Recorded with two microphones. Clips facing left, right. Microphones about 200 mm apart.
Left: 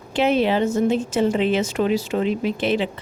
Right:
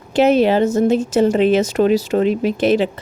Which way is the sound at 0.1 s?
40° right (ahead or behind).